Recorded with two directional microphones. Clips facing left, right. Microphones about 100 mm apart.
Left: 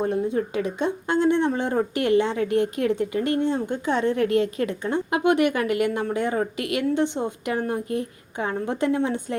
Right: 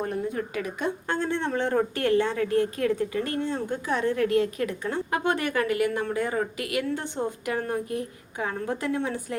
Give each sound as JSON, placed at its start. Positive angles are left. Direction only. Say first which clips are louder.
{"t": 0.0, "sound": "speech", "louder": "left 5 dB", "side_deg": 20}